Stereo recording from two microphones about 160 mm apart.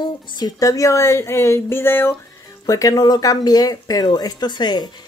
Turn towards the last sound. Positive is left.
turn(degrees=25)  # may be behind; listen again after turning